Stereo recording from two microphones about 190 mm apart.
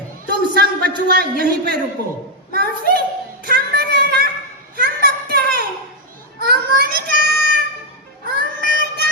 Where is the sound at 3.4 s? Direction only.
55° right (ahead or behind).